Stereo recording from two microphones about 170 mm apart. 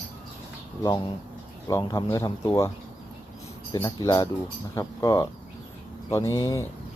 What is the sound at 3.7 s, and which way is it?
Speech, 25° left (ahead or behind).